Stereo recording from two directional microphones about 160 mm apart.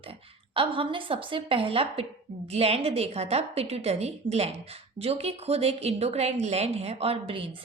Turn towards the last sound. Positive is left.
turn(degrees=-35)  # may be behind; listen again after turning